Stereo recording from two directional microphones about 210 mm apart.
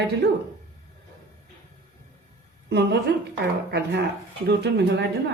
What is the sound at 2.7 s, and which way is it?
A woman's voice, 55° right (ahead or behind).